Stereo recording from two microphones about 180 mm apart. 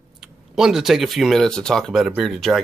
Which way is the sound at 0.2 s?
5° right (ahead or behind).